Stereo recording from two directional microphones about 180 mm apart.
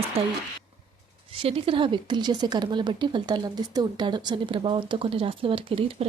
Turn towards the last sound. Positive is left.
turn(degrees=-30)  # may be behind; listen again after turning